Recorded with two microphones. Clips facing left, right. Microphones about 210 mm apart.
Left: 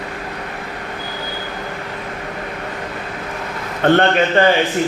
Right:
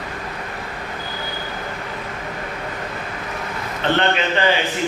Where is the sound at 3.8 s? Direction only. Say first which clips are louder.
Left 7 dB; 50° left (ahead or behind).